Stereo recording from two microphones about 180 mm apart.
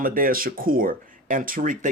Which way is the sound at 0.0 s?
50° right (ahead or behind).